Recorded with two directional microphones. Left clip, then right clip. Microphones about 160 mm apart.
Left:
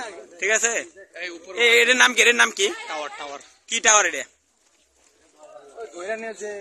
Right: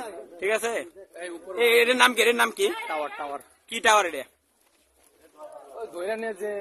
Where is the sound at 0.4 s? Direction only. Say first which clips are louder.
Left 4 dB; 5° right (ahead or behind).